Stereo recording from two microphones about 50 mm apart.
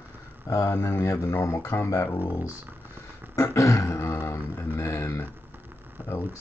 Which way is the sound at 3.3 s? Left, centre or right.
Left.